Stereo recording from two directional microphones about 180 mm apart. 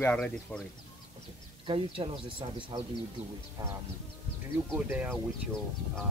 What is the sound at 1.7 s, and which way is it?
Speech, 30° right (ahead or behind).